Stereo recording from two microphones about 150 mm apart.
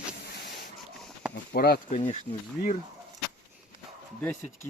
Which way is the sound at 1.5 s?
90° left.